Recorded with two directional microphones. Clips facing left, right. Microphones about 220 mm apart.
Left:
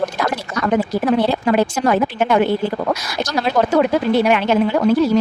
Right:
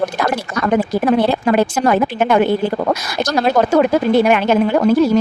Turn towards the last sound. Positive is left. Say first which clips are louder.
# right 2 dB
turn(degrees=-50)  # may be behind; listen again after turning